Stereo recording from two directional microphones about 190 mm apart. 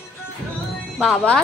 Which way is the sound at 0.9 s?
Centre (ahead or behind).